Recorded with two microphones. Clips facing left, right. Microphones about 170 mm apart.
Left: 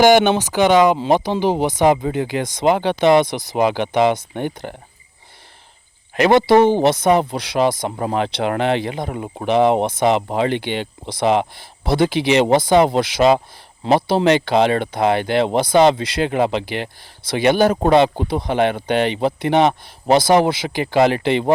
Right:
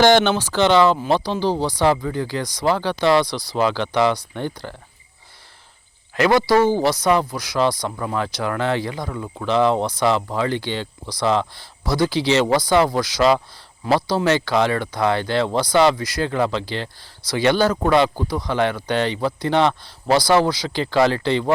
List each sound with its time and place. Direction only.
0.0 s speech: 15° left (ahead or behind)
6.1 s speech: 20° left (ahead or behind)